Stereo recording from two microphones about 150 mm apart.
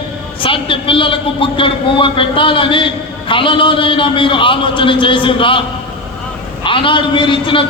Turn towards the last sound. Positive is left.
turn(degrees=35)  # may be behind; listen again after turning